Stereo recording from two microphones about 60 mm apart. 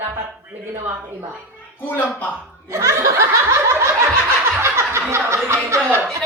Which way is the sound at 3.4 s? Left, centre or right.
Right.